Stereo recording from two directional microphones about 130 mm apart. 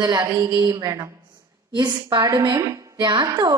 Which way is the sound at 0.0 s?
25° right (ahead or behind).